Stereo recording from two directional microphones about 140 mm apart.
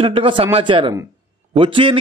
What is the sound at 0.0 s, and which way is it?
A man's voice, 40° right (ahead or behind).